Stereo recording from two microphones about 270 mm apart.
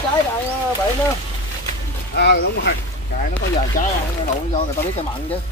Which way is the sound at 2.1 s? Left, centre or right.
Left.